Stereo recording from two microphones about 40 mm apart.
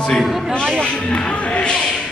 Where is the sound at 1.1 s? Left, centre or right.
Left.